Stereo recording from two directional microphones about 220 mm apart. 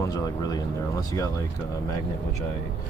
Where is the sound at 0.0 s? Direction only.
15° left (ahead or behind).